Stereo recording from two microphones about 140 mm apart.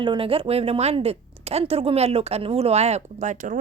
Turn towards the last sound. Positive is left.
turn(degrees=-60)  # may be behind; listen again after turning